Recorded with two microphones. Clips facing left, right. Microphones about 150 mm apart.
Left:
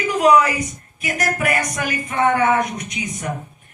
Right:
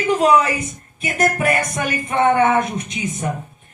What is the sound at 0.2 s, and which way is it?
Speech, 30° right (ahead or behind).